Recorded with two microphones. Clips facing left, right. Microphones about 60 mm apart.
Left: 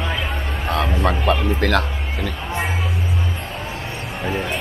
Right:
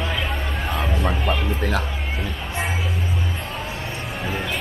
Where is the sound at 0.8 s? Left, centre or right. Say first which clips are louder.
Left 5 dB; left.